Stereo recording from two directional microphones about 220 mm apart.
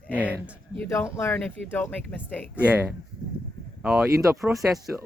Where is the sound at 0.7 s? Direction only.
10° left (ahead or behind).